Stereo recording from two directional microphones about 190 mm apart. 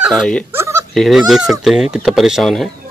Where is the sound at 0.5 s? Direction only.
15° right (ahead or behind).